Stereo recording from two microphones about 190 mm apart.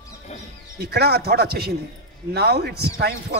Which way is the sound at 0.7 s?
55° right (ahead or behind).